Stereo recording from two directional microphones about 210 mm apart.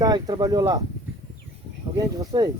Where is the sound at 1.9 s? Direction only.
20° right (ahead or behind).